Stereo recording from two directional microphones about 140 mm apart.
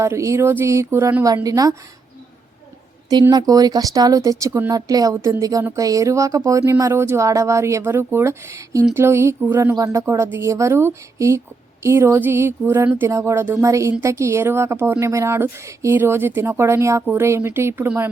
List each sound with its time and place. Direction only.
0.0 s speech: 20° right (ahead or behind)
3.1 s speech: 30° right (ahead or behind)